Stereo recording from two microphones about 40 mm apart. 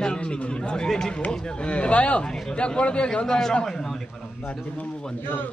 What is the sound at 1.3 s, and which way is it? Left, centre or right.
Speech, left.